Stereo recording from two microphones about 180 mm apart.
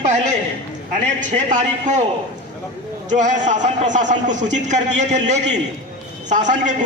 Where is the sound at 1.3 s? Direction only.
40° right (ahead or behind).